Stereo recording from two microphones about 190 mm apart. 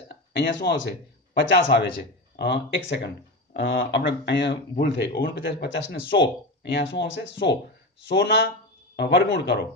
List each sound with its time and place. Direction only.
0.3 s speech: 70° left (ahead or behind)